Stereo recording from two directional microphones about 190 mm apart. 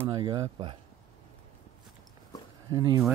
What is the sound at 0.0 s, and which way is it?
Speech, 20° right (ahead or behind).